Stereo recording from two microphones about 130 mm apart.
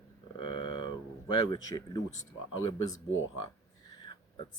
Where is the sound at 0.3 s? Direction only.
40° left (ahead or behind).